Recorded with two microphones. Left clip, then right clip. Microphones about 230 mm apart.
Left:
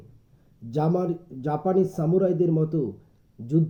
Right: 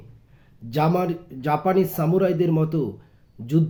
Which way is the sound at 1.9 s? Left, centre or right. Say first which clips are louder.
Right 3 dB; right.